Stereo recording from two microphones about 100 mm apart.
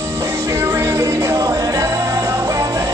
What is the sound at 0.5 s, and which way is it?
Music, 30° right (ahead or behind).